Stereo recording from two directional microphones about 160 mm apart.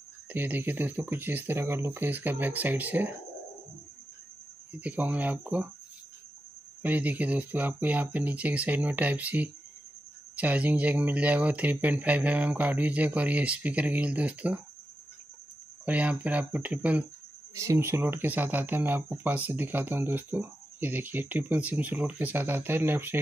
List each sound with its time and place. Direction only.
0.3 s speech: 10° right (ahead or behind)
4.7 s speech: 10° right (ahead or behind)
6.8 s speech: 10° right (ahead or behind)
15.8 s speech: 10° right (ahead or behind)